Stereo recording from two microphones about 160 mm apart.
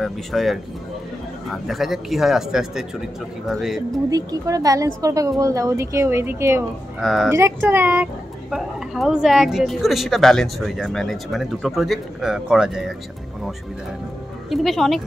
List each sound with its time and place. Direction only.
0.0 s speech: centre (ahead or behind)
4.1 s speech: 20° right (ahead or behind)
7.0 s speech: centre (ahead or behind)
7.2 s speech: 15° right (ahead or behind)
14.5 s speech: centre (ahead or behind)